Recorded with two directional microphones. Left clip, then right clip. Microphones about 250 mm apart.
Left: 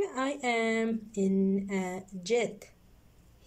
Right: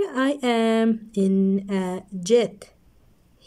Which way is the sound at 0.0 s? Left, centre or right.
Right.